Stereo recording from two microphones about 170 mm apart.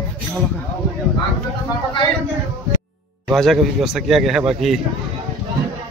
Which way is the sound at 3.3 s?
Centre (ahead or behind).